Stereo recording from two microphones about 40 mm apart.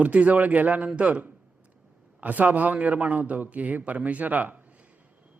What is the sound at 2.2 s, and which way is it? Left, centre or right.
Speech, right.